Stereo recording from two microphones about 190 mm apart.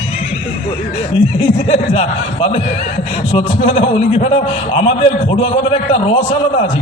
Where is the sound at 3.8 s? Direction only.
30° left (ahead or behind).